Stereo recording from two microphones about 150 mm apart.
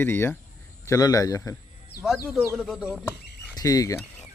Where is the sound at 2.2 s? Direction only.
10° right (ahead or behind).